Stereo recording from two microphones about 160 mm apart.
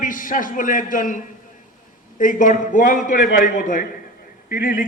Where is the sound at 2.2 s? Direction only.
55° left (ahead or behind).